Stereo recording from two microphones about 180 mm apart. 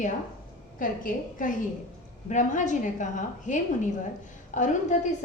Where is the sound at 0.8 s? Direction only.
50° left (ahead or behind).